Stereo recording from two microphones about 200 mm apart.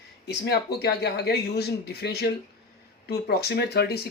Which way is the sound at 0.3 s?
55° left (ahead or behind).